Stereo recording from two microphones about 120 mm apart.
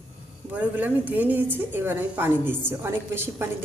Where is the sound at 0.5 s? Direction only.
10° right (ahead or behind).